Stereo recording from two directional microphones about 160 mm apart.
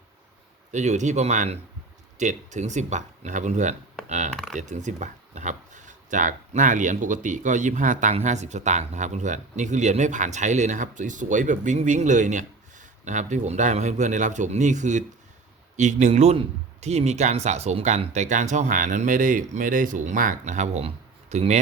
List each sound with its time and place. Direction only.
0.7 s speech: 50° right (ahead or behind)